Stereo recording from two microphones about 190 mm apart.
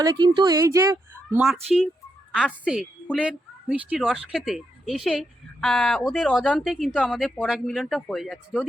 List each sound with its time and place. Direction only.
0.0 s speech: 20° right (ahead or behind)
2.6 s speech: 5° right (ahead or behind)